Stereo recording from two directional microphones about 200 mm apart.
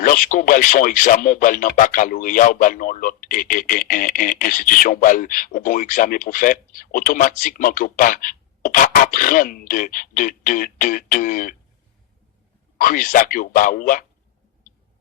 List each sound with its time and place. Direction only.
0.0 s speech: 40° left (ahead or behind)
12.8 s speech: 40° left (ahead or behind)